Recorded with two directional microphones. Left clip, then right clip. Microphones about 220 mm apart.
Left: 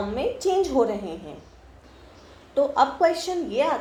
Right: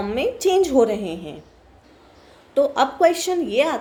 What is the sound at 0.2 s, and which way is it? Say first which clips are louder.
Speech: right 5 dB; 55° right (ahead or behind).